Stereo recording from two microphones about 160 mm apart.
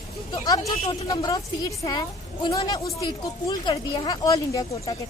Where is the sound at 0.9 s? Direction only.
25° left (ahead or behind).